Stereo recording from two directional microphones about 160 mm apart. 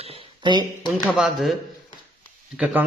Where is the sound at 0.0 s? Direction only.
35° right (ahead or behind).